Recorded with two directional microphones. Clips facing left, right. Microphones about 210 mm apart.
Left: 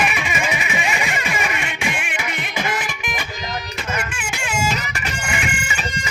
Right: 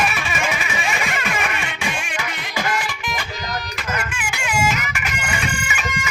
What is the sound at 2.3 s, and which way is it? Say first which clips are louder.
Music: even; 20° left (ahead or behind).